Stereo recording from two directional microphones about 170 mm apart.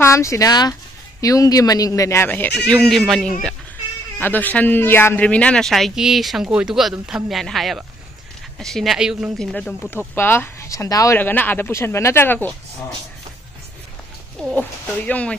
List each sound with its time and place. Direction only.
0.0 s speech: 15° left (ahead or behind); by 3.3 s centre (ahead or behind)
4.2 s speech: 10° left (ahead or behind)
14.5 s speech: 10° left (ahead or behind)